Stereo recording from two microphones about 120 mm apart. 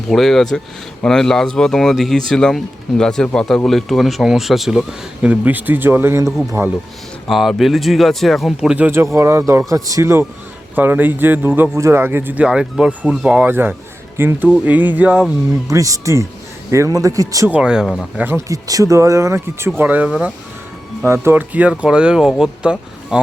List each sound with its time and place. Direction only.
0.1 s speech: 5° left (ahead or behind); by 6.3 s 20° right (ahead or behind)
7.3 s speech: centre (ahead or behind)
15.7 s speech: 25° right (ahead or behind)
17.5 s speech: 5° right (ahead or behind)
18.2 s speech: 20° right (ahead or behind)